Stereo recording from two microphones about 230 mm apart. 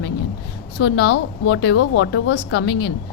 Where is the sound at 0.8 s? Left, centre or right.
Left.